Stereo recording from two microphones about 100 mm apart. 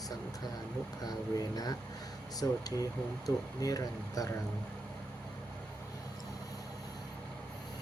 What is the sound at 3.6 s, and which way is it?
Speech, 35° left (ahead or behind).